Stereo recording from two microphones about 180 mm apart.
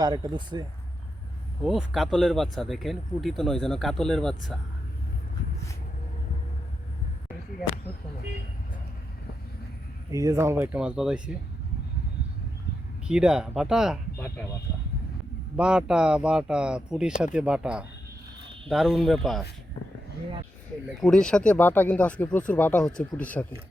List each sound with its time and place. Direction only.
0.0 s speech: 20° right (ahead or behind)
1.6 s speech: centre (ahead or behind)
10.1 s speech: 20° right (ahead or behind)
13.1 s speech: 5° right (ahead or behind)
14.2 s speech: 15° left (ahead or behind)
15.5 s speech: 5° right (ahead or behind)
21.0 s speech: 5° left (ahead or behind)